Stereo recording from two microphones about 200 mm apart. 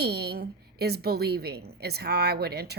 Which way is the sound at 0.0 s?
55° right (ahead or behind).